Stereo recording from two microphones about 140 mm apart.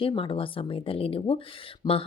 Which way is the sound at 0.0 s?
40° left (ahead or behind).